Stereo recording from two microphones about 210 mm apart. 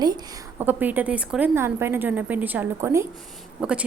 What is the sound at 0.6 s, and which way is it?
A woman's voice, 10° right (ahead or behind).